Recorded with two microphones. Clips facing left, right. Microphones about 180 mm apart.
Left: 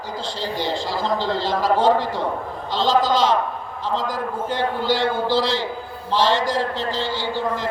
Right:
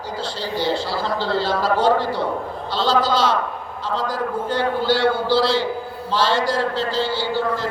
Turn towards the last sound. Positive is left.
turn(degrees=15)  # may be behind; listen again after turning